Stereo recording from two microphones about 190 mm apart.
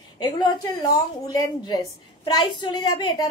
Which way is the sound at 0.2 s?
20° left (ahead or behind).